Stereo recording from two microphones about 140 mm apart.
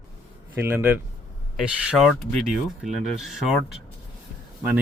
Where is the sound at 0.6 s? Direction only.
15° right (ahead or behind).